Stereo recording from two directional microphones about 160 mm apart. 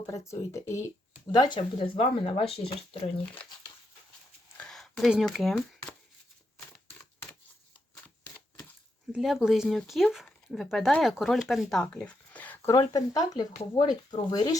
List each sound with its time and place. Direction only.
0.1 s speech: 20° left (ahead or behind); by 3.1 s 40° left (ahead or behind)
4.5 s a sound: 5° left (ahead or behind)
9.1 s speech: 5° right (ahead or behind)
12.7 s speech: 25° left (ahead or behind)